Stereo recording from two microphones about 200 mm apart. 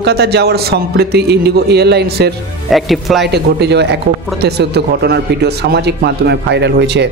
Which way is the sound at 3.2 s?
55° right (ahead or behind).